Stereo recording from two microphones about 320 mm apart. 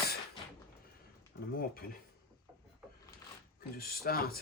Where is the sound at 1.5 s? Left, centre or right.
Left.